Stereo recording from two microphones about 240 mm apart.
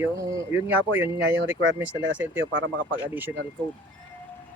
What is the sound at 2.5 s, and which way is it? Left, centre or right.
Speech, right.